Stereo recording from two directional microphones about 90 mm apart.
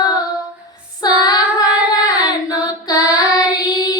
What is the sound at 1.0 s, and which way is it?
Child singing, 50° left (ahead or behind).